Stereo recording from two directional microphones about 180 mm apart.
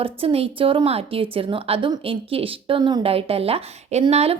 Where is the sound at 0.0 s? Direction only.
30° right (ahead or behind).